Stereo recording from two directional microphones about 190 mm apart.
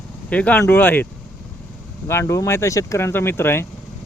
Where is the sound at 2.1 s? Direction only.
15° left (ahead or behind).